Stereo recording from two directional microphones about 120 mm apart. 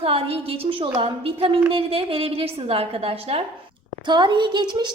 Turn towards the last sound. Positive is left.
turn(degrees=-35)  # may be behind; listen again after turning